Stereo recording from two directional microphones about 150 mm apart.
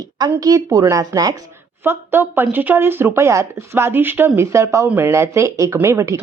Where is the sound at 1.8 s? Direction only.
15° right (ahead or behind).